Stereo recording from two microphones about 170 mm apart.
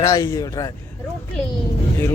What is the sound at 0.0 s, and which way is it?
Speech, 20° left (ahead or behind).